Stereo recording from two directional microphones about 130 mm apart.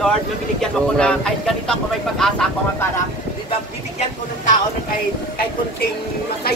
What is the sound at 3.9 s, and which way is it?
Speech, 75° left (ahead or behind).